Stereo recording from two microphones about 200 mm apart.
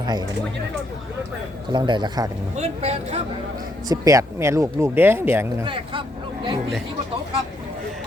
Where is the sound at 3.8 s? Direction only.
15° right (ahead or behind).